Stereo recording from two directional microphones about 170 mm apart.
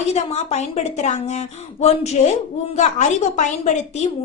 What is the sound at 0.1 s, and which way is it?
Speech, 40° left (ahead or behind).